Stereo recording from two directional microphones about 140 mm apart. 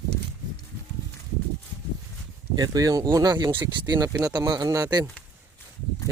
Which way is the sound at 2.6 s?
25° right (ahead or behind).